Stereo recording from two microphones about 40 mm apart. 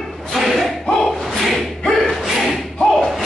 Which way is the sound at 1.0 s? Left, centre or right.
Centre.